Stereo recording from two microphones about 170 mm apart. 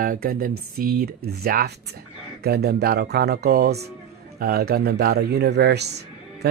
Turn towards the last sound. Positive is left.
turn(degrees=-75)  # may be behind; listen again after turning